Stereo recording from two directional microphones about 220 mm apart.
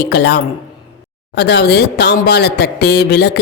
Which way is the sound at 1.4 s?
50° left (ahead or behind).